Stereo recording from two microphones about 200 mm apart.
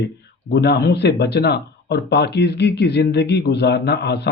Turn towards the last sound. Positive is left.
turn(degrees=55)  # may be behind; listen again after turning